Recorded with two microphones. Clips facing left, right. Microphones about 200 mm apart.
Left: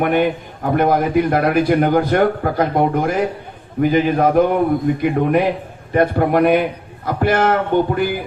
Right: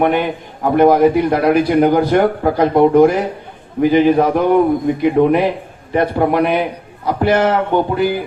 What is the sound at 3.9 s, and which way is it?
Speech, 50° left (ahead or behind).